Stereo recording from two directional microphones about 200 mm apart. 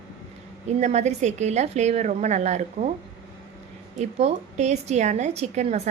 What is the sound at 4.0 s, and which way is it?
A woman's voice, 35° right (ahead or behind).